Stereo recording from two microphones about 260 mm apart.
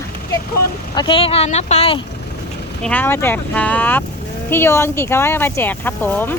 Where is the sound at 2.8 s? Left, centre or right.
Centre.